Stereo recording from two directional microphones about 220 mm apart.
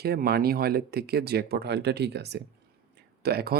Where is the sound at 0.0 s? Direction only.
45° right (ahead or behind).